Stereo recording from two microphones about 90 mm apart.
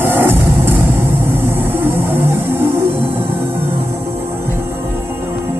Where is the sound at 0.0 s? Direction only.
25° right (ahead or behind).